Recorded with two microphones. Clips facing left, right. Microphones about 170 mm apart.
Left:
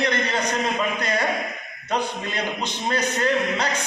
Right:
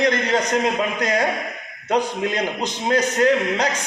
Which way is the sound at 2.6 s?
45° right (ahead or behind).